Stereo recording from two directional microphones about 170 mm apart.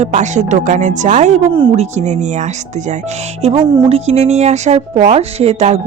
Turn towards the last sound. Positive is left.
turn(degrees=-40)  # may be behind; listen again after turning